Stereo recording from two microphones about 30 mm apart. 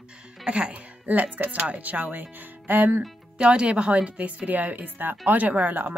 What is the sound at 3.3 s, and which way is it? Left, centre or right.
Speech, right.